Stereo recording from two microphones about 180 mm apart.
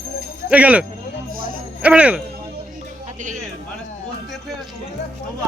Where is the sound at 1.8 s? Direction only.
5° right (ahead or behind).